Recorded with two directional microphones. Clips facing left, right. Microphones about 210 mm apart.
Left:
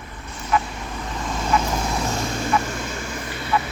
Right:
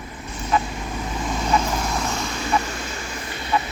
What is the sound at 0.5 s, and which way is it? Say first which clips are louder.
Speech: even; 25° right (ahead or behind).